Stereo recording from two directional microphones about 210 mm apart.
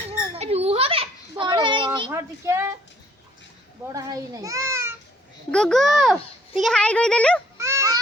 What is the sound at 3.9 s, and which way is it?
A child's voice, 15° right (ahead or behind).